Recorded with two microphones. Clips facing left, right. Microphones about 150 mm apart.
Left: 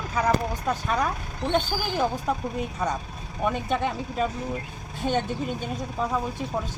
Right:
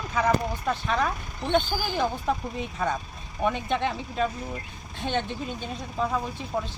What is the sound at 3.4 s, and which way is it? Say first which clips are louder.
Speech: even; 5° left (ahead or behind).